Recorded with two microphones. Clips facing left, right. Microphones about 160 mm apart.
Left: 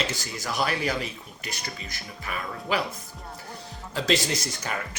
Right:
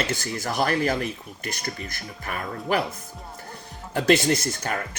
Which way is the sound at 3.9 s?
55° right (ahead or behind).